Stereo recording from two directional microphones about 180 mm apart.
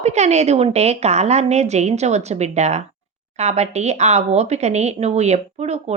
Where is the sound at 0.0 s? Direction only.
40° right (ahead or behind).